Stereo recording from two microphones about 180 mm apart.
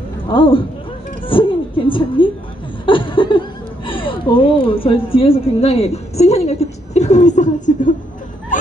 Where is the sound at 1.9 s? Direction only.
30° left (ahead or behind); by 7.9 s 45° left (ahead or behind).